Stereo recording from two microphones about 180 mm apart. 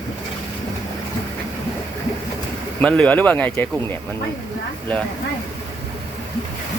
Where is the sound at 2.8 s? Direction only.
5° left (ahead or behind).